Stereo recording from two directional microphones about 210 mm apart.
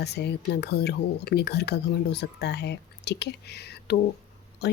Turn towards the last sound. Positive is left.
turn(degrees=50)  # may be behind; listen again after turning